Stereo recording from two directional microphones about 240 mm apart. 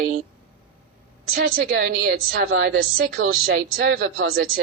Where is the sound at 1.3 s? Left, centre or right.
Right.